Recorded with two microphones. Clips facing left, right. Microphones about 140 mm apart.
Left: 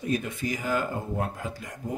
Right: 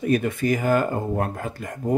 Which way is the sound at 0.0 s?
60° right (ahead or behind).